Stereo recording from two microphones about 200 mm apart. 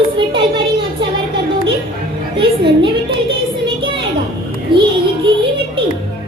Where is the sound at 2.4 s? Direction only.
25° right (ahead or behind).